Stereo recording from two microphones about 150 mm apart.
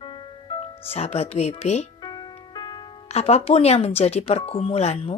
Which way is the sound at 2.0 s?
30° left (ahead or behind).